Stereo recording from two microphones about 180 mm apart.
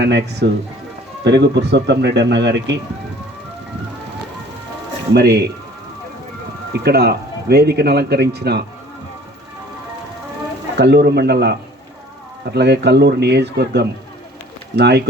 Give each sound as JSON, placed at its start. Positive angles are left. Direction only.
{"t": 0.0, "sound": "speech", "side_deg": -70}
{"t": 5.1, "sound": "speech", "side_deg": -65}
{"t": 6.7, "sound": "speech", "side_deg": -65}
{"t": 10.8, "sound": "speech", "side_deg": -70}
{"t": 12.5, "sound": "speech", "side_deg": -70}